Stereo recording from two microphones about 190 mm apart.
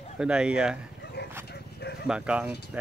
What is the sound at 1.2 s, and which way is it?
Dog, 60° left (ahead or behind).